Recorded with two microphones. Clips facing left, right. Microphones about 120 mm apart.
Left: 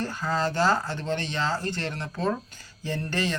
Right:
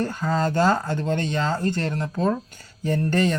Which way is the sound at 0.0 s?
20° right (ahead or behind).